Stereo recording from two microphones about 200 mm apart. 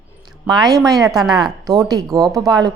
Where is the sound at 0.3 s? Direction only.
20° right (ahead or behind).